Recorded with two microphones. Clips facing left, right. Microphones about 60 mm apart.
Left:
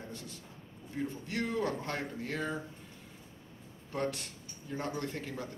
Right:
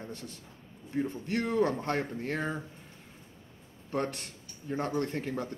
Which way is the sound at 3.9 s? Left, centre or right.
Right.